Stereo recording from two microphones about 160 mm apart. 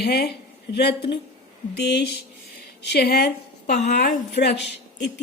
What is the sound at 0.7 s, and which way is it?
A woman's voice, 90° left.